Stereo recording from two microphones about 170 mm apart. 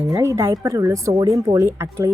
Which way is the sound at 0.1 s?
15° right (ahead or behind).